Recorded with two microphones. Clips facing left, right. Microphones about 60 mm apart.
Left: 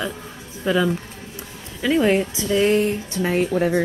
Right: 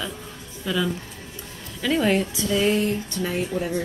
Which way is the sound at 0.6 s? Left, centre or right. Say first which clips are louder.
Left 5 dB; left.